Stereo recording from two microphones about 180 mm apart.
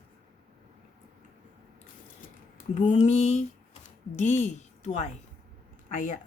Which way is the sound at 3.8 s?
40° left (ahead or behind).